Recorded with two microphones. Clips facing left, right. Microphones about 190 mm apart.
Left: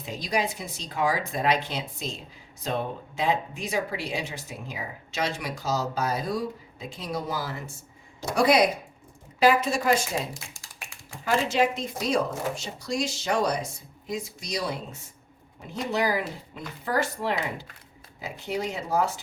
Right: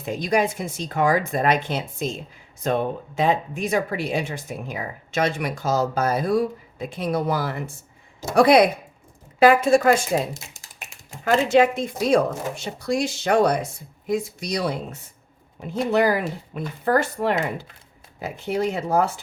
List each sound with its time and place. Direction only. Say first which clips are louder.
0.0 s speech: right 7 dB; 50° right (ahead or behind)
10.3 s a sound: right 2 dB; 20° right (ahead or behind)
11.3 s speech: right 6 dB; 55° right (ahead or behind)
15.9 s speech: right 6 dB; 55° right (ahead or behind)